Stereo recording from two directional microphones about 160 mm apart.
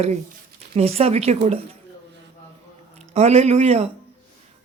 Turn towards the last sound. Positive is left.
turn(degrees=-40)  # may be behind; listen again after turning